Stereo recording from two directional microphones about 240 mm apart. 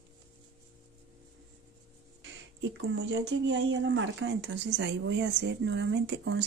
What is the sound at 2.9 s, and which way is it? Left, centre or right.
Speech, right.